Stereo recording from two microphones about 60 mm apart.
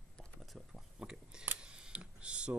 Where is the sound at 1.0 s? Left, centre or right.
Centre.